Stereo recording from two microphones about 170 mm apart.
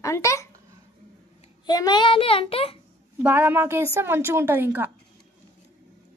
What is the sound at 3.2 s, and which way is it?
A woman's voice, 10° right (ahead or behind).